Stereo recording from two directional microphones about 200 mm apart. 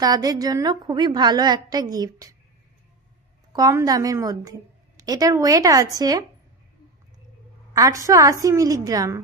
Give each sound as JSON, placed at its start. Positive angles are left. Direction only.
{"t": 0.0, "sound": "a woman's voice", "side_deg": -20}
{"t": 3.5, "sound": "a woman's voice", "side_deg": -20}
{"t": 7.7, "sound": "a woman's voice", "side_deg": -15}